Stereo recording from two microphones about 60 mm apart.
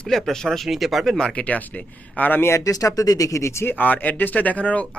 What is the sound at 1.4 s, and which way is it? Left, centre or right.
Speech, left.